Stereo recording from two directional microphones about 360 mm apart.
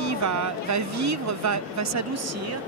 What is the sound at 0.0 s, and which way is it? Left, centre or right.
Speech, right.